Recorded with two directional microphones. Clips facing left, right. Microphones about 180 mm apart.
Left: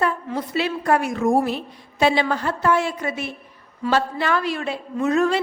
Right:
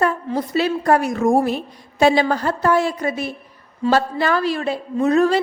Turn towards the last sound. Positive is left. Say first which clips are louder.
# right 4 dB
turn(degrees=-35)  # may be behind; listen again after turning